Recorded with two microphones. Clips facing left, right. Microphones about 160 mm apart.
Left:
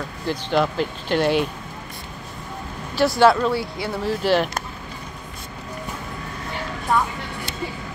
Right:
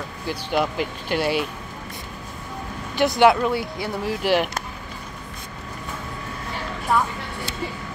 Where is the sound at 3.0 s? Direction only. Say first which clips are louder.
Left 1 dB; 15° right (ahead or behind).